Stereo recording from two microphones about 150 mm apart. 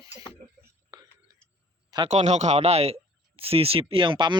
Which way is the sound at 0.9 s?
25° right (ahead or behind).